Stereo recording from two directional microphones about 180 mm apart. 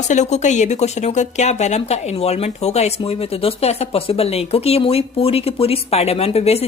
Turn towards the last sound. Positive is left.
turn(degrees=35)  # may be behind; listen again after turning